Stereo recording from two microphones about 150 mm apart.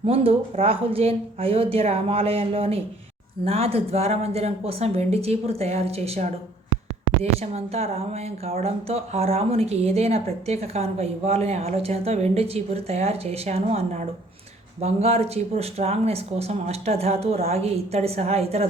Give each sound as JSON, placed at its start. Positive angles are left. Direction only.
{"t": 0.0, "sound": "speech", "side_deg": -40}